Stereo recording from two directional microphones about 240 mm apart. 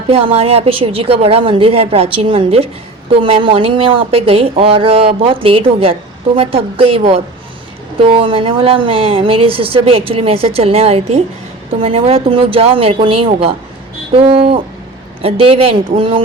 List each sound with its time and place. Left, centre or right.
0.1 s speech: right